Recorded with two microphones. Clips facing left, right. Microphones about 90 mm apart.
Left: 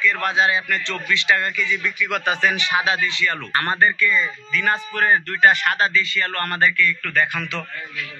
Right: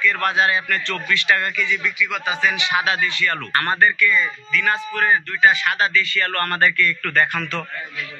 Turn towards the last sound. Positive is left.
turn(degrees=5)  # may be behind; listen again after turning